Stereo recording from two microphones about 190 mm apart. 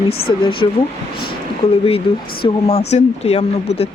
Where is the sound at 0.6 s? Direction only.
25° left (ahead or behind).